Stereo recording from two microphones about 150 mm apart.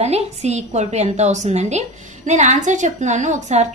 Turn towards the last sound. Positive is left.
turn(degrees=-50)  # may be behind; listen again after turning